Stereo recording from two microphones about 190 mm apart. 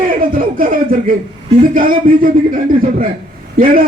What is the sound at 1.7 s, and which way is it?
A man's voice, 50° right (ahead or behind).